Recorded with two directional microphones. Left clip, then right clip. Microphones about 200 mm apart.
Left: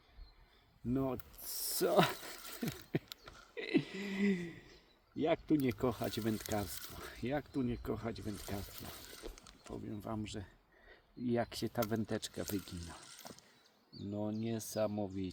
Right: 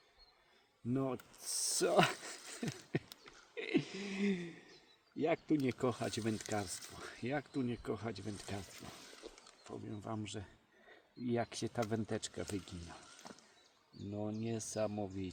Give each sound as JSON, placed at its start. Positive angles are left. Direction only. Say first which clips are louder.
{"t": 0.9, "sound": "speech", "louder": "left 1 dB", "side_deg": 15}
{"t": 2.9, "sound": "a sound", "louder": "left 1 dB", "side_deg": 20}
{"t": 5.1, "sound": "speech", "louder": "left 2 dB", "side_deg": 25}
{"t": 9.2, "sound": "wild animals", "louder": "left 2 dB", "side_deg": 35}
{"t": 9.6, "sound": "speech", "louder": "left 1 dB", "side_deg": 35}
{"t": 14.1, "sound": "speech", "louder": "left 1 dB", "side_deg": 35}